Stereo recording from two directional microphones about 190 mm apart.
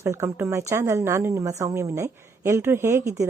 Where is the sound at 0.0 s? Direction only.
15° right (ahead or behind).